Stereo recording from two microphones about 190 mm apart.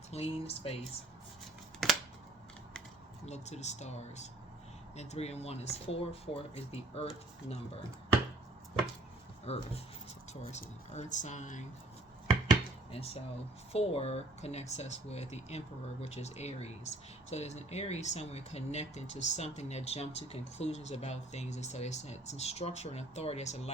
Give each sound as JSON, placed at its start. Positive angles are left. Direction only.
{"t": 0.1, "sound": "speech", "side_deg": 30}
{"t": 1.8, "sound": "a sound", "side_deg": 0}
{"t": 3.2, "sound": "speech", "side_deg": 35}
{"t": 9.5, "sound": "speech", "side_deg": 35}
{"t": 12.9, "sound": "speech", "side_deg": 30}